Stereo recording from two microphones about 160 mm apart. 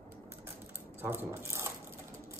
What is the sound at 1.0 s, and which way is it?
Speech, 15° right (ahead or behind).